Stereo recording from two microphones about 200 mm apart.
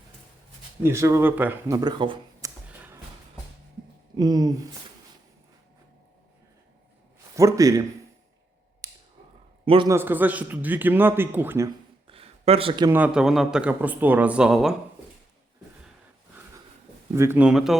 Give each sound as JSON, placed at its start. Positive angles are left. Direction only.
{"t": 0.8, "sound": "a man's voice", "side_deg": -15}
{"t": 2.6, "sound": "a sound", "side_deg": -10}
{"t": 4.2, "sound": "speech", "side_deg": -20}
{"t": 7.3, "sound": "a man's voice", "side_deg": -15}
{"t": 8.8, "sound": "a sound", "side_deg": -15}
{"t": 9.6, "sound": "speech", "side_deg": -25}
{"t": 9.9, "sound": "a man's voice", "side_deg": -10}
{"t": 12.0, "sound": "a sound", "side_deg": -30}
{"t": 12.9, "sound": "a man's voice", "side_deg": -5}
{"t": 17.2, "sound": "a man's voice", "side_deg": -10}